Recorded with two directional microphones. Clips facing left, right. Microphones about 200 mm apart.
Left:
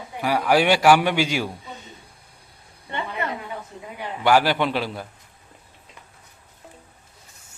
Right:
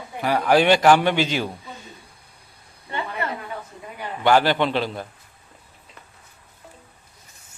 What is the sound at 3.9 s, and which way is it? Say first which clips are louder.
A man's voice: right 1 dB; 10° left (ahead or behind).